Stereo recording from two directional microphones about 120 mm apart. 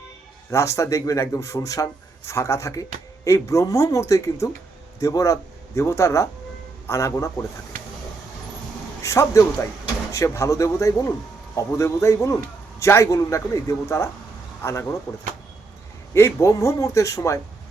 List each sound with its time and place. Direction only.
0.5 s speech: 25° left (ahead or behind)
9.0 s speech: 25° left (ahead or behind)